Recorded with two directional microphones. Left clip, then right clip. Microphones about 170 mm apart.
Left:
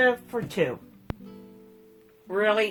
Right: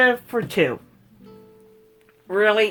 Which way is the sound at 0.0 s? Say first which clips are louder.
Right 5 dB; 45° right (ahead or behind).